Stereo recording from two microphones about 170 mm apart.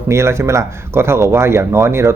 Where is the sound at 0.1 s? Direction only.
15° right (ahead or behind).